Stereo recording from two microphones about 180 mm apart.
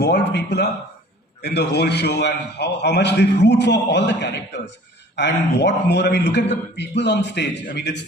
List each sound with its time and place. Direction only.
0.0 s a man's voice: 70° left (ahead or behind)